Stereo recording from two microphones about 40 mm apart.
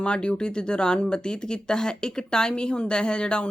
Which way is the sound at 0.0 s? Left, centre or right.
Left.